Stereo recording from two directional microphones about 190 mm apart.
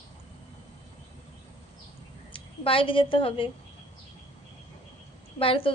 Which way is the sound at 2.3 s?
30° left (ahead or behind).